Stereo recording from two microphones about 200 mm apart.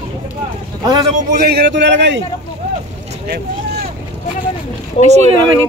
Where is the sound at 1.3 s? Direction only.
50° right (ahead or behind).